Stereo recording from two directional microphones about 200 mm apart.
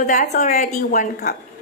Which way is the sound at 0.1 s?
40° left (ahead or behind).